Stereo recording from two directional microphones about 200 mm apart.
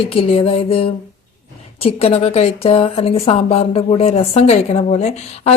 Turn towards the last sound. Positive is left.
turn(degrees=30)  # may be behind; listen again after turning